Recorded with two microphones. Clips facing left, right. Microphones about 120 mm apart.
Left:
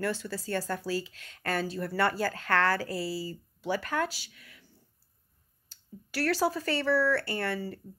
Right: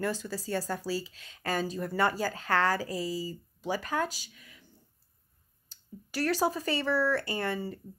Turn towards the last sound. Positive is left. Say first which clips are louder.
# even
turn(degrees=-20)  # may be behind; listen again after turning